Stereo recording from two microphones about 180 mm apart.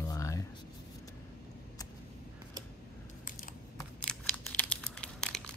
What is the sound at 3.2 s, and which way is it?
Computer keyboard, 50° left (ahead or behind).